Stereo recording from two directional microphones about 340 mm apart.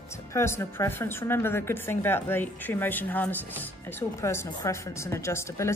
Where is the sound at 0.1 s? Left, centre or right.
Centre.